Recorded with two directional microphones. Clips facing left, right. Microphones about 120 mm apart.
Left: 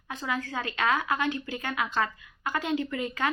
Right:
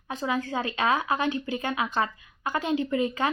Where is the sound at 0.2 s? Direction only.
25° right (ahead or behind).